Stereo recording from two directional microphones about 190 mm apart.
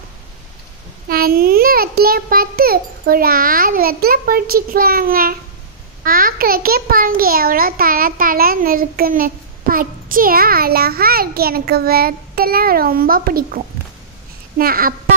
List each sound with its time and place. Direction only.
1.0 s a child's voice: 50° right (ahead or behind)
14.6 s a child's voice: 50° right (ahead or behind)